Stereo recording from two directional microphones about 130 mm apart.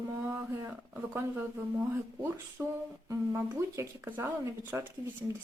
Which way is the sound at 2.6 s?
15° right (ahead or behind).